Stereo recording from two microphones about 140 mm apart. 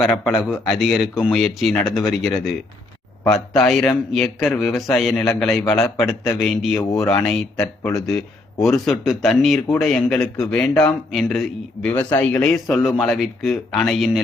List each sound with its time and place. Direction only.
0.0 s speech: 5° right (ahead or behind)
7.6 s speech: 25° left (ahead or behind)
8.0 s a man's voice: centre (ahead or behind)